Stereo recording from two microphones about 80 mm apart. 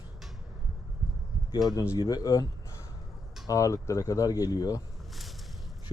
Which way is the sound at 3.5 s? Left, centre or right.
Left.